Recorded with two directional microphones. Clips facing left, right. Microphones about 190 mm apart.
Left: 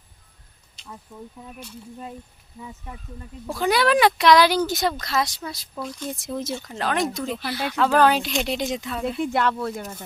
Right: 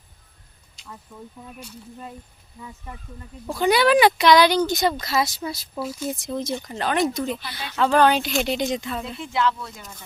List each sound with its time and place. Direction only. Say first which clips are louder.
0.9 s speech: left 1 dB; 5° left (ahead or behind)
3.4 s speech: right 2 dB; centre (ahead or behind)
9.2 s speech: even; 55° left (ahead or behind)